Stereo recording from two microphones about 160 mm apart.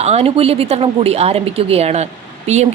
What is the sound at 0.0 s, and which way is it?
A woman's voice, 40° right (ahead or behind).